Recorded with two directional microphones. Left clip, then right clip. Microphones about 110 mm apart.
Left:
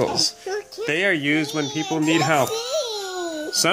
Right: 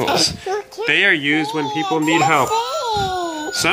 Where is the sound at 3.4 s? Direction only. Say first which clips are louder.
Right 1 dB; 40° left (ahead or behind).